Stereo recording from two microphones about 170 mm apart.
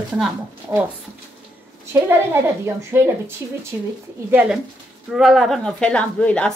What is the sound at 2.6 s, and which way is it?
A woman's voice, 15° right (ahead or behind).